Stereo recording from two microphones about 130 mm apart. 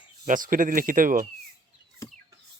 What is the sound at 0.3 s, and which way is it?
Speech, 90° right.